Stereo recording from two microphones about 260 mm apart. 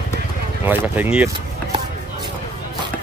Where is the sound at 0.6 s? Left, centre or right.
Centre.